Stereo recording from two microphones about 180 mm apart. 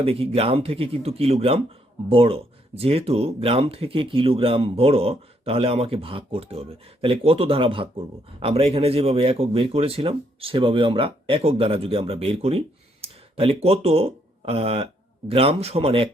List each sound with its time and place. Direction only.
0.0 s speech: 35° right (ahead or behind)